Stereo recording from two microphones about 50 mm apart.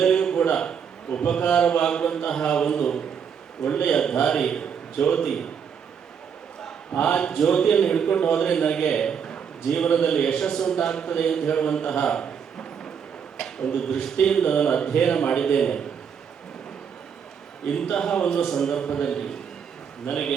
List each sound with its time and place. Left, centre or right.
0.0 s a sound: centre
0.5 s a man's voice: centre
3.6 s a man's voice: left
3.8 s a man's voice: centre
7.2 s a man's voice: centre
17.7 s a man's voice: centre